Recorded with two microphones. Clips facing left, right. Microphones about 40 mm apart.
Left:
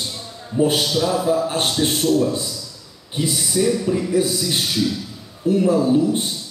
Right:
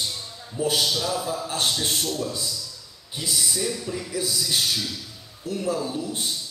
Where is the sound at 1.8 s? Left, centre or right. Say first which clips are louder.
Left 8 dB; centre.